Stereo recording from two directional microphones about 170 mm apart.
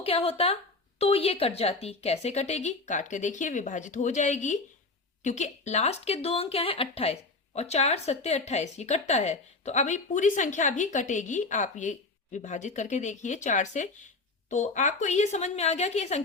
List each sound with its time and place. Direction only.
0.0 s a woman's voice: 35° left (ahead or behind)